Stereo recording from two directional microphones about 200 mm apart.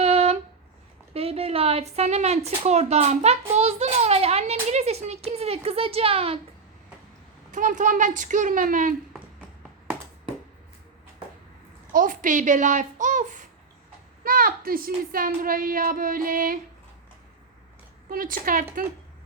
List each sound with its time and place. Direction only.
0.0 s a sound: 30° right (ahead or behind)
1.1 s a woman's voice: 30° right (ahead or behind)
7.5 s a child's voice: 40° right (ahead or behind)
11.9 s a child's voice: 40° right (ahead or behind)
18.1 s a woman's voice: 45° right (ahead or behind)